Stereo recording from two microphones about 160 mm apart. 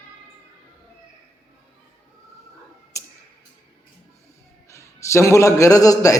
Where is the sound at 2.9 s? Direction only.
20° left (ahead or behind).